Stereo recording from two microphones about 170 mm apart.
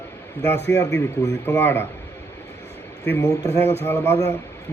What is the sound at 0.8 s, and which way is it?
A man's voice, 20° left (ahead or behind).